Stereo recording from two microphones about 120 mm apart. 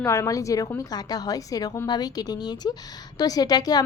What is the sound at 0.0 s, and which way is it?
A woman's voice, 25° left (ahead or behind).